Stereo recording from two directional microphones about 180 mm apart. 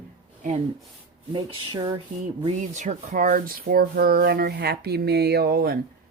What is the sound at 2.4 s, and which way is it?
Speech, 45° right (ahead or behind).